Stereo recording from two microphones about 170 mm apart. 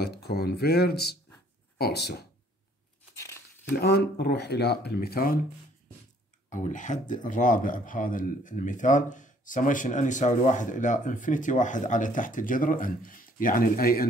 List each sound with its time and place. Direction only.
0.0 s speech: 70° left (ahead or behind)
3.8 s speech: 70° left (ahead or behind)
6.5 s speech: 50° left (ahead or behind)